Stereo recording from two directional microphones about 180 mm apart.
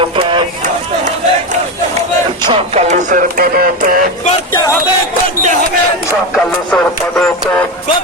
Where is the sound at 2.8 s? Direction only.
45° right (ahead or behind).